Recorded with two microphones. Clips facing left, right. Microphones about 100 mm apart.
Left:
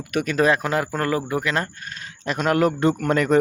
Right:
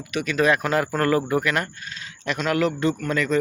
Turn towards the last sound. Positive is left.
turn(degrees=55)  # may be behind; listen again after turning